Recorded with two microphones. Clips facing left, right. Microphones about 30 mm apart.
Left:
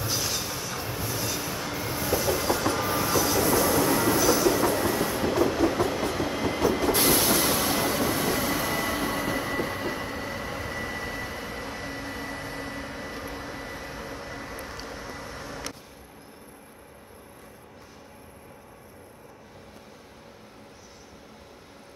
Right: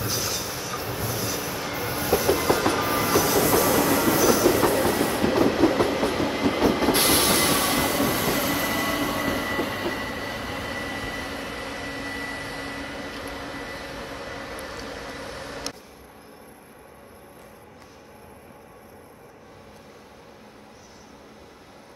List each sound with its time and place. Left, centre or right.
0.0 s train: centre; by 2.4 s right
2.4 s train: right
4.5 s train: right
5.4 s train: right